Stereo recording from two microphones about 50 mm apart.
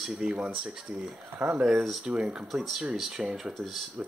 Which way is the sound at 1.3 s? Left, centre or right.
Right.